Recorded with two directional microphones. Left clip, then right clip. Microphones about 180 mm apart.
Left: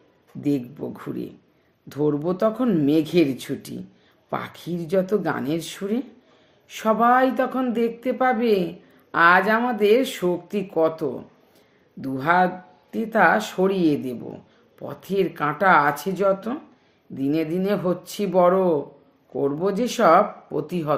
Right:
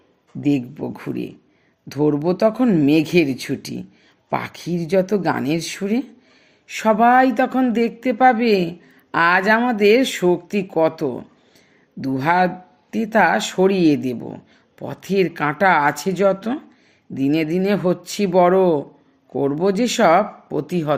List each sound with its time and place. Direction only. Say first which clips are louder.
0.4 s speech: right 4 dB; 35° right (ahead or behind)